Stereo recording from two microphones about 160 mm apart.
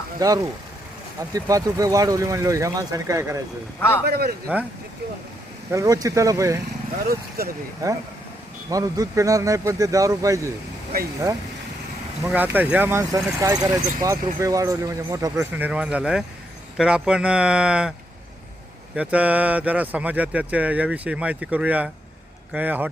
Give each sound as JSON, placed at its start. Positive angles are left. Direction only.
{"t": 0.2, "sound": "speech", "side_deg": -25}
{"t": 3.8, "sound": "a man's voice", "side_deg": 15}
{"t": 4.0, "sound": "speech", "side_deg": -75}
{"t": 5.7, "sound": "speech", "side_deg": -20}
{"t": 7.1, "sound": "speech", "side_deg": -70}
{"t": 7.8, "sound": "speech", "side_deg": -20}
{"t": 12.2, "sound": "speech", "side_deg": -10}
{"t": 15.5, "sound": "speech", "side_deg": -10}
{"t": 18.9, "sound": "speech", "side_deg": -10}